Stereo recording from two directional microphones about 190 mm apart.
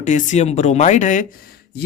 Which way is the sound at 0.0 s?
40° left (ahead or behind).